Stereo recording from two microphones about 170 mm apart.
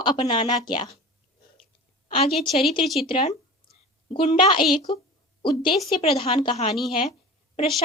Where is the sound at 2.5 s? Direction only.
30° left (ahead or behind).